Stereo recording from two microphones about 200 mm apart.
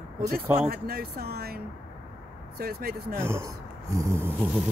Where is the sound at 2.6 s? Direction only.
50° right (ahead or behind).